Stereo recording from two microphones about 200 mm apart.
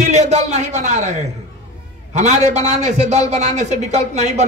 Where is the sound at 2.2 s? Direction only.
35° right (ahead or behind).